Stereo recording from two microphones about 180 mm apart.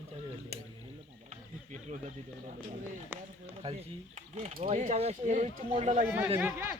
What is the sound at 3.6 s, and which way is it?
Speech, 35° right (ahead or behind).